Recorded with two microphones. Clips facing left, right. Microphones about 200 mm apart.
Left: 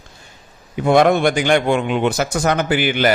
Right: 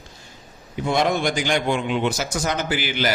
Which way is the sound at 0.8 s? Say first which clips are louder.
Left 8 dB; 55° left (ahead or behind).